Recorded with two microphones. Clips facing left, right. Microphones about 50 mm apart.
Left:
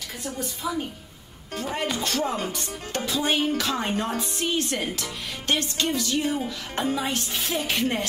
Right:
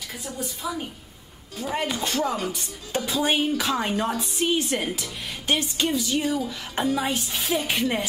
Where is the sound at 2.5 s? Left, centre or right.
Centre.